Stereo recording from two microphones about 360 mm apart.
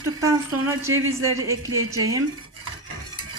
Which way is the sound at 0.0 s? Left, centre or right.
Centre.